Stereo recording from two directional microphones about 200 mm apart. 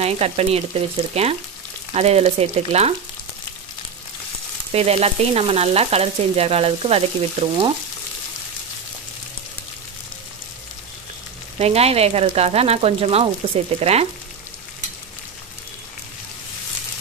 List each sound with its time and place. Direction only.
0.0 s frying: 30° right (ahead or behind)
4.7 s frying: 30° right (ahead or behind)
11.5 s frying: 30° right (ahead or behind)